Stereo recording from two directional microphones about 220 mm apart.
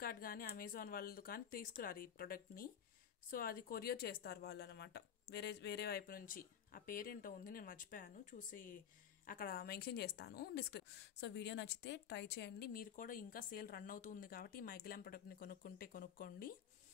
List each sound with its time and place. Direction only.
0.0 s a woman's voice: 40° left (ahead or behind)